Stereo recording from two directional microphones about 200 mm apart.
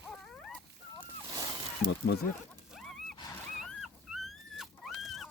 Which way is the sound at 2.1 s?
55° left (ahead or behind).